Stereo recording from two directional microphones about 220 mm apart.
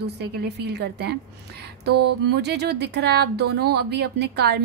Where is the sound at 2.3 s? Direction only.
50° right (ahead or behind).